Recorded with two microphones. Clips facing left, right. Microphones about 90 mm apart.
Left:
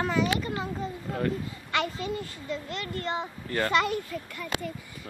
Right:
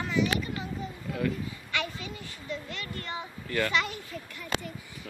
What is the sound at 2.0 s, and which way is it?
A child's voice, 35° left (ahead or behind).